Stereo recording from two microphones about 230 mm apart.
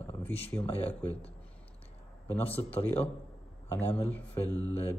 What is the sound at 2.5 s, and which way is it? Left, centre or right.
Speech, left.